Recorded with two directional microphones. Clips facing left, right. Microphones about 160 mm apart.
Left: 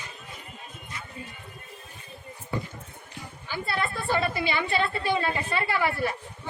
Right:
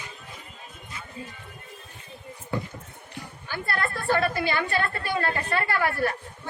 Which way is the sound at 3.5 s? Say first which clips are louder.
Even; 10° left (ahead or behind).